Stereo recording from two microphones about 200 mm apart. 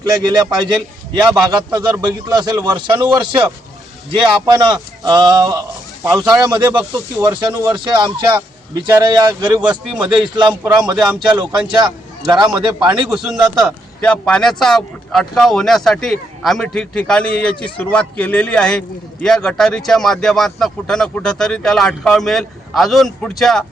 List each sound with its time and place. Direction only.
0.0 s a man's voice: 20° right (ahead or behind)
9.6 s speech: 5° right (ahead or behind)
10.3 s a man's voice: 20° right (ahead or behind)
12.3 s a man's voice: 20° right (ahead or behind)
13.1 s speech: centre (ahead or behind)